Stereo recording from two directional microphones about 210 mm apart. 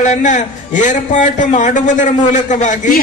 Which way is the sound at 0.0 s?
35° left (ahead or behind).